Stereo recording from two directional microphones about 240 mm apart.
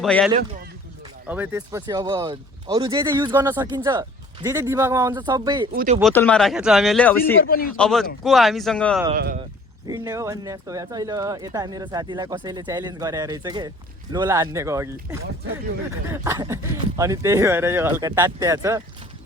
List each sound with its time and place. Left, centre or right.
0.0 s speech: centre
0.3 s a man's voice: right
1.3 s speech: centre
5.7 s speech: right
6.0 s speech: centre
7.4 s a man's voice: left
7.8 s speech: centre
9.1 s speech: right
9.8 s speech: centre